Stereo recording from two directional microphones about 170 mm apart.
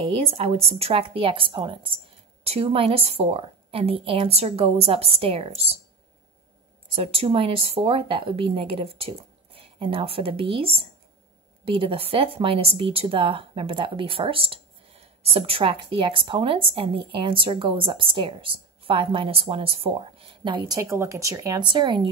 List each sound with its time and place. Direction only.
0.0 s speech: 35° right (ahead or behind)
7.0 s a woman's voice: 35° right (ahead or behind)